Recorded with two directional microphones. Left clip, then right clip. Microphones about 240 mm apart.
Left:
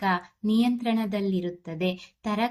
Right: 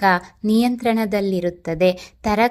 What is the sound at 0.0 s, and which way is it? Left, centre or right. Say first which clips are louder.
A woman's voice: right 9 dB; right.